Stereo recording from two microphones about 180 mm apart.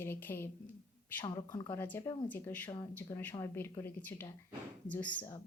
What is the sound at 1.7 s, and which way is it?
A woman's voice, 10° left (ahead or behind).